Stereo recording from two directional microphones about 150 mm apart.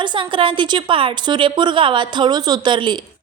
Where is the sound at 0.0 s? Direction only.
30° right (ahead or behind).